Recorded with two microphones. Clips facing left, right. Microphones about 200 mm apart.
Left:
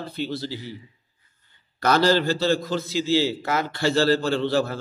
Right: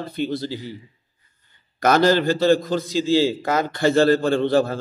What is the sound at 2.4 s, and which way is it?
A man's voice, 50° right (ahead or behind).